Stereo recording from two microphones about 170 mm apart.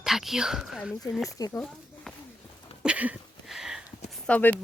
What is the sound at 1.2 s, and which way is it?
Speech, 20° left (ahead or behind).